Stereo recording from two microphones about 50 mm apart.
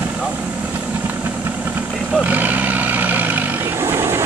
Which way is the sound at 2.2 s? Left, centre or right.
Right.